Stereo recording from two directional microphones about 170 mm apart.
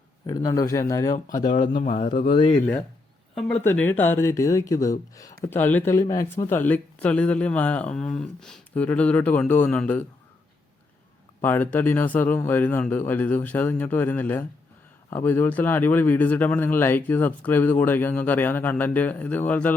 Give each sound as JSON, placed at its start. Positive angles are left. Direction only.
{"t": 0.3, "sound": "speech", "side_deg": 20}
{"t": 1.1, "sound": "speech", "side_deg": 45}
{"t": 2.3, "sound": "speech", "side_deg": 30}
{"t": 3.3, "sound": "speech", "side_deg": 0}
{"t": 11.4, "sound": "speech", "side_deg": 10}